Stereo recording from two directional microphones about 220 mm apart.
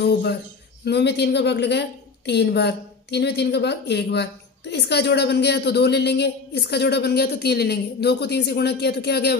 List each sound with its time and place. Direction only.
0.0 s a woman's voice: 50° left (ahead or behind)